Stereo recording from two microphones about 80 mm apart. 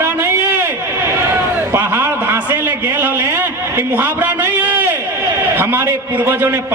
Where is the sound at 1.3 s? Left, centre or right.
Right.